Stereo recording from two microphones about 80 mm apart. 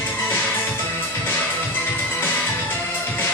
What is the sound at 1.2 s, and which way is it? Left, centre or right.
Music, left.